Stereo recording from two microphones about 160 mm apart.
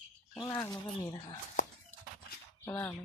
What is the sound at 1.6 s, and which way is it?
Horse, 50° left (ahead or behind).